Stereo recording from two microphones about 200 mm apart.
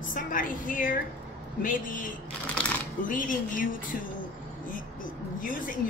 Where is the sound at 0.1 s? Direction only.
40° left (ahead or behind).